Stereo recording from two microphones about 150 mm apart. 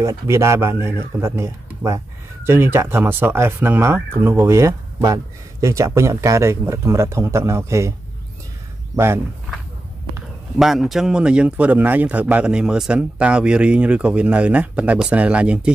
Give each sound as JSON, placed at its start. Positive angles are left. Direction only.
{"t": 0.0, "sound": "speech", "side_deg": -20}
{"t": 8.9, "sound": "speech", "side_deg": -15}
{"t": 10.6, "sound": "speech", "side_deg": 0}